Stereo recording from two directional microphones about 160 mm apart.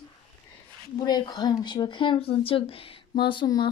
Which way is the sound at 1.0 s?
25° left (ahead or behind).